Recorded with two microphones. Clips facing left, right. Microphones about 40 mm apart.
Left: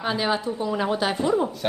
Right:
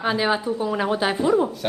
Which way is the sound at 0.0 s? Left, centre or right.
Centre.